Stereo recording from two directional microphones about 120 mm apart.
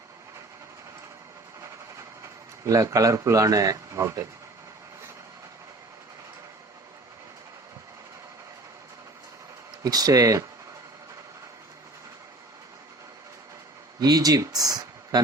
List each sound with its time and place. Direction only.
2.6 s speech: 30° right (ahead or behind)
9.8 s speech: 30° right (ahead or behind)
14.0 s speech: 30° right (ahead or behind)